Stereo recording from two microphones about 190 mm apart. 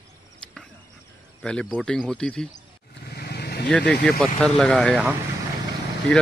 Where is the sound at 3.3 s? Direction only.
55° left (ahead or behind).